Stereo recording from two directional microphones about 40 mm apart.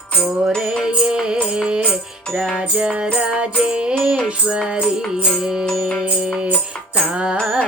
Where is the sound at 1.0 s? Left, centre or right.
Right.